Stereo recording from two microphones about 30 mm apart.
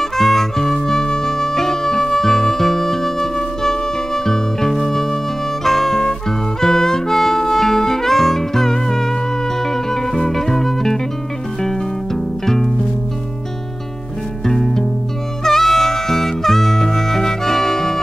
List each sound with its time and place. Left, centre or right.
0.0 s music: centre
6.6 s harmonica: centre
9.6 s music: centre
14.4 s music: centre